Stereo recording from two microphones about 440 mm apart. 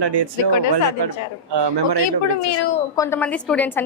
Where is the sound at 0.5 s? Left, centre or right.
Left.